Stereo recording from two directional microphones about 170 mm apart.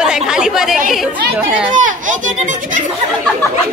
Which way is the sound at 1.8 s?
50° right (ahead or behind).